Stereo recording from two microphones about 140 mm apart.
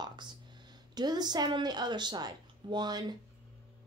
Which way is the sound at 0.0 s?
30° right (ahead or behind).